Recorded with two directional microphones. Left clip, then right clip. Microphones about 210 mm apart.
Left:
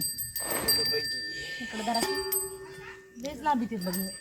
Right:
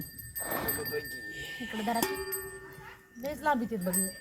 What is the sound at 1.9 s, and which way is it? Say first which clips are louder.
Speech: left 2 dB; 50° right (ahead or behind).